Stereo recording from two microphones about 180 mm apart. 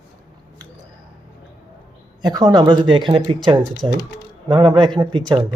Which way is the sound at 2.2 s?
20° right (ahead or behind).